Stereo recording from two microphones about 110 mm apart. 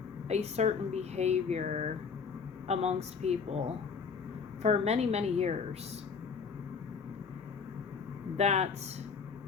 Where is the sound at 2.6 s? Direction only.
75° right (ahead or behind).